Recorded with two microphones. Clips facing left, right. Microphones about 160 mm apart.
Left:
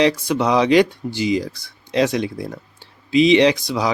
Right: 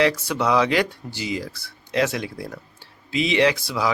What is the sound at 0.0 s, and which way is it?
A man's voice, 20° left (ahead or behind).